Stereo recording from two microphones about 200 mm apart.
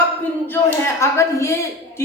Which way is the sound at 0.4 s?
10° left (ahead or behind).